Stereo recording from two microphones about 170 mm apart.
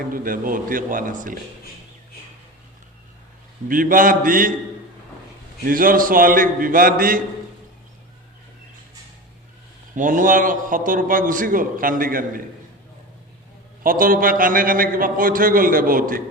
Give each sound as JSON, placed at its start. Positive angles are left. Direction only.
{"t": 0.1, "sound": "a man's voice", "side_deg": -55}
{"t": 3.7, "sound": "a man's voice", "side_deg": -55}
{"t": 5.6, "sound": "a man's voice", "side_deg": -55}
{"t": 9.9, "sound": "a man's voice", "side_deg": -50}
{"t": 13.8, "sound": "a man's voice", "side_deg": -55}